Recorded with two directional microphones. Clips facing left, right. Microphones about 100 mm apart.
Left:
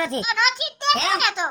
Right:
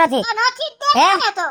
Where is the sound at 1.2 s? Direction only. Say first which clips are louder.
Right 4 dB; 35° right (ahead or behind).